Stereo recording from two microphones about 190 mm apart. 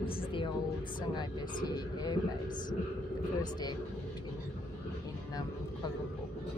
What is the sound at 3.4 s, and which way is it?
Speech, 20° left (ahead or behind).